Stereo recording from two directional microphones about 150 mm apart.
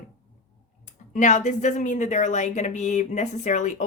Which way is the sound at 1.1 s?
55° left (ahead or behind).